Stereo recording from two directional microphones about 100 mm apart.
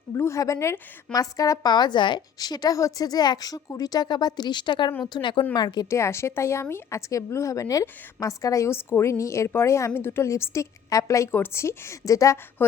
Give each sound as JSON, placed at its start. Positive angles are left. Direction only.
{"t": 0.1, "sound": "a woman's voice", "side_deg": 30}
{"t": 5.5, "sound": "a woman's voice", "side_deg": 45}
{"t": 5.9, "sound": "a woman's voice", "side_deg": 25}